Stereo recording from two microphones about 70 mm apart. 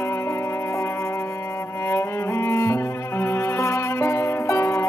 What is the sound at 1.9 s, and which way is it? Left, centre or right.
Cello, left.